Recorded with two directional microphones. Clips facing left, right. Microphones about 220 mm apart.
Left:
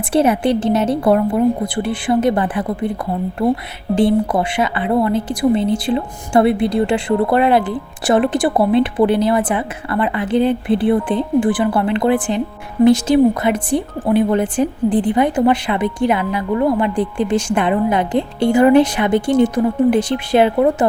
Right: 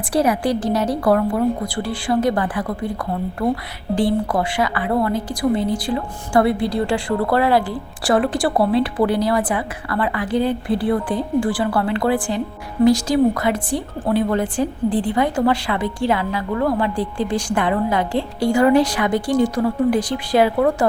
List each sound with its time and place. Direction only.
0.1 s a woman's voice: 25° left (ahead or behind)